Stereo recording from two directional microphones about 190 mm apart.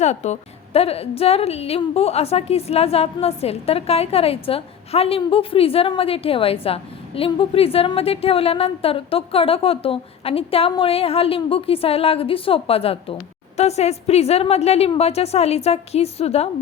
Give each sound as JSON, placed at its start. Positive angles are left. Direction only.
{"t": 0.0, "sound": "a woman's voice", "side_deg": 35}